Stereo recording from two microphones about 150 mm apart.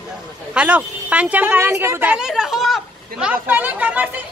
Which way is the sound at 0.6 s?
10° right (ahead or behind).